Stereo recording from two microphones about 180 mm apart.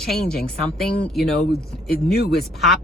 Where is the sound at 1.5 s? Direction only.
60° left (ahead or behind).